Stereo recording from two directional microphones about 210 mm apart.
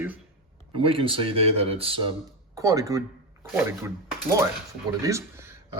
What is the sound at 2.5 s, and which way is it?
Speech, 15° right (ahead or behind).